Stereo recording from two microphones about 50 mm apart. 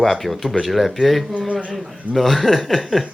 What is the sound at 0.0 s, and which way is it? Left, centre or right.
A man's voice, centre.